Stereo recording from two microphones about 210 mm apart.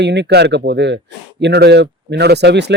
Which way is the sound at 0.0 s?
55° right (ahead or behind).